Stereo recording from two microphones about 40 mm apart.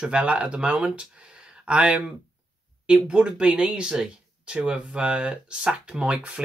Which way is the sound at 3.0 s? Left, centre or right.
Right.